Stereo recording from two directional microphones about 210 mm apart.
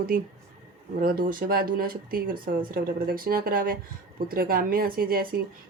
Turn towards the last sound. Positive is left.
turn(degrees=-45)  # may be behind; listen again after turning